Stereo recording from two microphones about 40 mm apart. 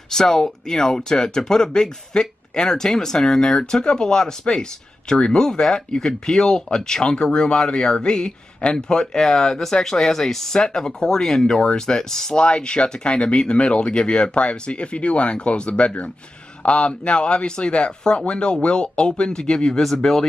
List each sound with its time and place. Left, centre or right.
0.1 s speech: centre